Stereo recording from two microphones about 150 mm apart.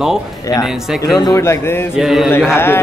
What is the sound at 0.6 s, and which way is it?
Speech, centre (ahead or behind).